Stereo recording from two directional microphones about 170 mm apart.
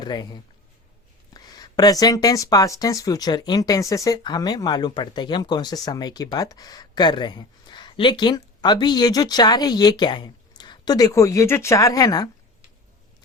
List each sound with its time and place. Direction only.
0.0 s speech: 25° left (ahead or behind)